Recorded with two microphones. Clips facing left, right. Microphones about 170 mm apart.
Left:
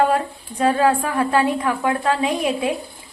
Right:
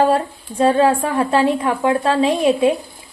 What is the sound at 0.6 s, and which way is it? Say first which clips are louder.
A woman's voice: right 3 dB; 25° right (ahead or behind).